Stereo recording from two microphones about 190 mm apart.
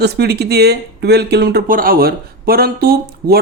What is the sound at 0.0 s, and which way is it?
Speech, 60° right (ahead or behind).